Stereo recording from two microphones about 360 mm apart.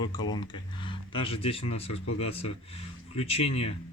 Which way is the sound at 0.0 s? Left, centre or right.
Centre.